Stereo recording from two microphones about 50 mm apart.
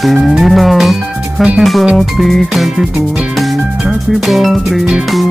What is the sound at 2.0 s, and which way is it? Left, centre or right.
Music, centre.